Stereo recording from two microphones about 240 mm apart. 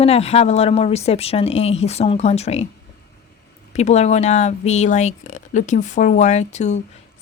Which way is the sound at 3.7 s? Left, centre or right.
Left.